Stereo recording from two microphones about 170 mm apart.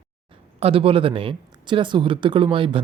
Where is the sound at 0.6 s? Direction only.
35° right (ahead or behind).